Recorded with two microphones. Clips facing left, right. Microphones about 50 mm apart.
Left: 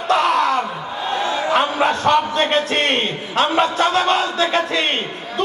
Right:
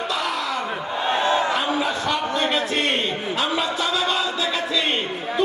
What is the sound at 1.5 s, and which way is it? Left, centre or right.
A man's voice, left.